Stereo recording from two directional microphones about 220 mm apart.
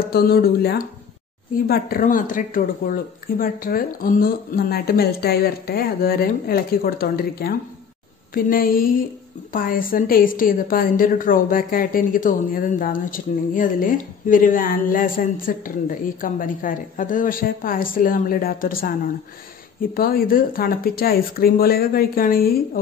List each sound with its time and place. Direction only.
0.1 s a woman's voice: 45° left (ahead or behind)
20.0 s speech: 40° left (ahead or behind)